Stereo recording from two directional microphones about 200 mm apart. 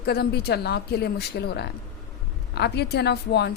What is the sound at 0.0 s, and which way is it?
A woman's voice, 55° left (ahead or behind).